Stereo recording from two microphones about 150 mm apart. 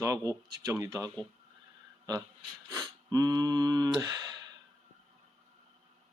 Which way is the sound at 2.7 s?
25° right (ahead or behind).